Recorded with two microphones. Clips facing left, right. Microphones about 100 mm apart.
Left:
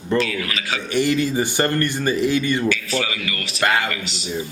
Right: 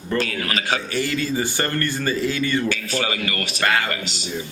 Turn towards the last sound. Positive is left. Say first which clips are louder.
# right 1 dB
turn(degrees=-35)  # may be behind; listen again after turning